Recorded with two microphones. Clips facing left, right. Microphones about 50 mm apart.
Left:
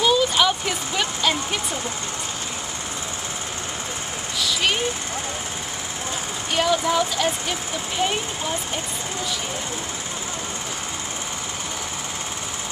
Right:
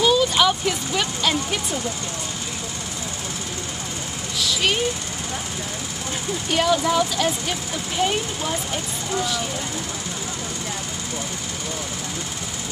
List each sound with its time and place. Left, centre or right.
0.0 s a sound: centre
4.4 s vehicle: centre
6.5 s speech: centre